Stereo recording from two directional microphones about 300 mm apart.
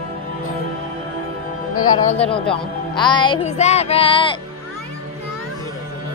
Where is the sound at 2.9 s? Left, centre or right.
Centre.